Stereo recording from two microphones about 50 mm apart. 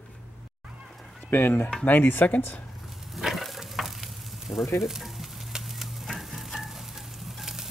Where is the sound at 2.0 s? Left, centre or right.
Left.